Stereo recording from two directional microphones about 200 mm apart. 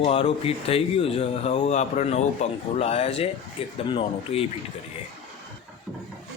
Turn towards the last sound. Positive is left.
turn(degrees=25)  # may be behind; listen again after turning